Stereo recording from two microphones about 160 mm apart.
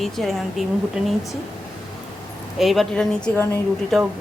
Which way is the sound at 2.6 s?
Centre (ahead or behind).